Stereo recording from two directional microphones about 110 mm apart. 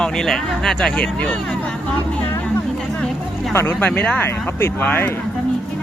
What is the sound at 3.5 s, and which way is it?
Speech, 15° left (ahead or behind).